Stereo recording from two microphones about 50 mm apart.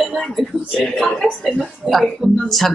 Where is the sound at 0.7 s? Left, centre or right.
Centre.